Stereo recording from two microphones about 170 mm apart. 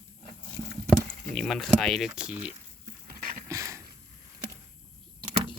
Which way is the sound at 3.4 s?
20° right (ahead or behind).